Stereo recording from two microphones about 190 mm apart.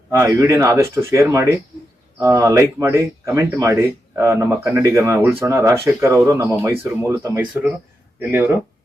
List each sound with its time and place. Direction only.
0.1 s speech: 15° right (ahead or behind)